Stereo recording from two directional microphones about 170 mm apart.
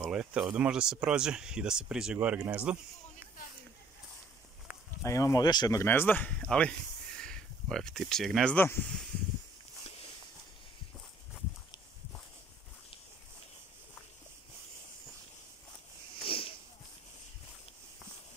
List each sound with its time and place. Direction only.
0.0 s speech: 5° right (ahead or behind)
5.0 s speech: 20° left (ahead or behind)
16.3 s a sound: 30° left (ahead or behind)